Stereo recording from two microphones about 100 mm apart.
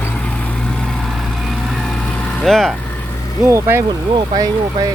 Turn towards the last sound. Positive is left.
turn(degrees=-40)  # may be behind; listen again after turning